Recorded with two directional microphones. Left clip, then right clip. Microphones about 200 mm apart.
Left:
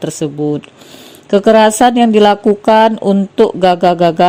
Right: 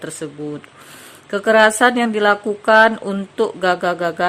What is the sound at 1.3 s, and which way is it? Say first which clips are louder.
Speech: left 5 dB; 35° left (ahead or behind).